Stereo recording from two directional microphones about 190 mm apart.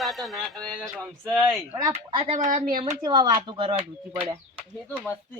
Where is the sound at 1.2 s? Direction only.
15° right (ahead or behind).